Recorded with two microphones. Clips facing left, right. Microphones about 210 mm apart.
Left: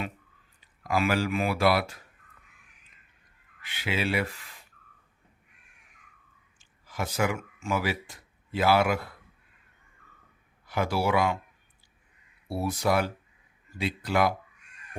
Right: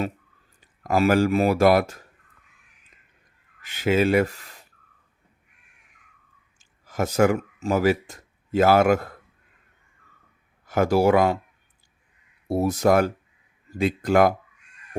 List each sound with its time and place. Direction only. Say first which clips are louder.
0.6 s speech: right 6 dB; 45° right (ahead or behind)
3.6 s speech: right 10 dB; 45° right (ahead or behind)
6.6 s speech: right 8 dB; 45° right (ahead or behind)
10.7 s speech: right 8 dB; 45° right (ahead or behind)
12.5 s speech: right 7 dB; 45° right (ahead or behind)